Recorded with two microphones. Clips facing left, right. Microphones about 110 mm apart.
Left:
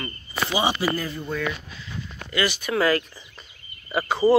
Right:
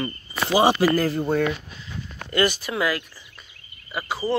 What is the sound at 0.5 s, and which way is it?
Speech, 45° right (ahead or behind).